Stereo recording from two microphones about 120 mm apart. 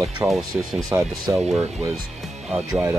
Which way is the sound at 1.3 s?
25° right (ahead or behind).